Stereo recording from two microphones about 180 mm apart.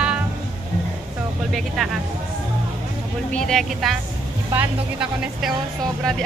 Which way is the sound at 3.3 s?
5° left (ahead or behind).